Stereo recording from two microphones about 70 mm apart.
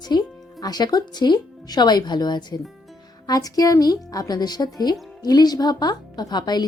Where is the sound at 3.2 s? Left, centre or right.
Left.